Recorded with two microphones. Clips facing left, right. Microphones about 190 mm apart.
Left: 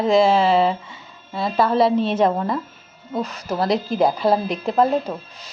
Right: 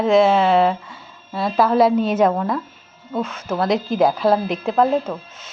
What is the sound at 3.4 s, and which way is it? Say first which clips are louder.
Speech: right 1 dB; 10° left (ahead or behind).